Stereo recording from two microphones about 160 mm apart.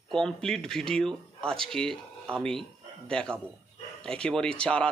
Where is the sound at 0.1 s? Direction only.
5° left (ahead or behind).